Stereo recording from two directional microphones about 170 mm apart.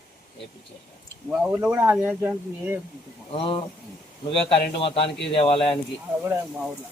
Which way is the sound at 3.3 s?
30° left (ahead or behind).